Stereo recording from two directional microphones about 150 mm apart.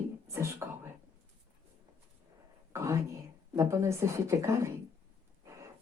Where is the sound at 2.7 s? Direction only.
20° right (ahead or behind).